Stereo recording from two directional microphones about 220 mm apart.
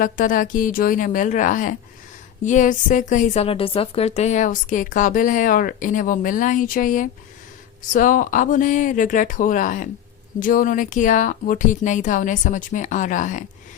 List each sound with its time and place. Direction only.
0.0 s a woman's voice: 35° left (ahead or behind)